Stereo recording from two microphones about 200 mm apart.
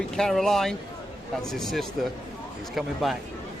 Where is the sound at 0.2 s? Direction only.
Centre (ahead or behind).